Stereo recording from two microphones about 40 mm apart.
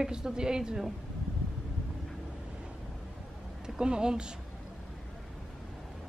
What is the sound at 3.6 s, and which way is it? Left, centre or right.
Speech, centre.